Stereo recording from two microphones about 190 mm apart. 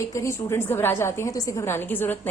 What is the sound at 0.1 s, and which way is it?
A woman's voice, 15° left (ahead or behind).